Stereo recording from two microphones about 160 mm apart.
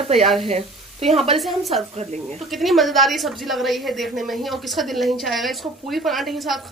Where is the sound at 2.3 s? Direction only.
Centre (ahead or behind).